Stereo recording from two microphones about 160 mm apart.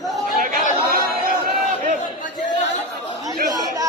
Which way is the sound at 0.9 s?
65° right (ahead or behind).